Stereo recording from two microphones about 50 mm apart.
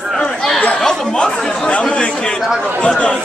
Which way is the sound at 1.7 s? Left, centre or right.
Left.